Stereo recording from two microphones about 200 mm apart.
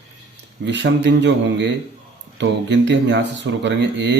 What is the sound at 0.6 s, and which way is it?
Speech, 60° right (ahead or behind).